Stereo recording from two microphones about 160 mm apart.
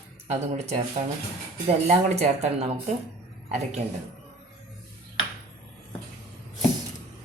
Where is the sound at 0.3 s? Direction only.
45° right (ahead or behind).